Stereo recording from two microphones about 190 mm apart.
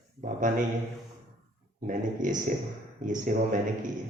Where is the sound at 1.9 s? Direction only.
45° right (ahead or behind).